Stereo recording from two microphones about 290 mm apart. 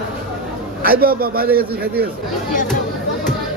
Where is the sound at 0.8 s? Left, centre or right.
Right.